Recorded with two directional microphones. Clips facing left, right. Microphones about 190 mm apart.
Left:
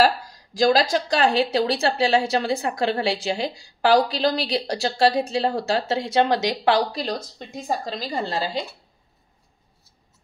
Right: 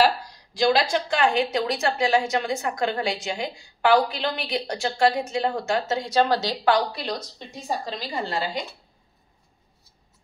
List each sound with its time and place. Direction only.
0.6 s a woman's voice: 40° left (ahead or behind); by 6.8 s 20° left (ahead or behind)
7.6 s a woman's voice: 40° left (ahead or behind)